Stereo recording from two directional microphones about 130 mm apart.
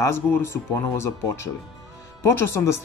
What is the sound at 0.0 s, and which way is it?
Speech, 20° left (ahead or behind).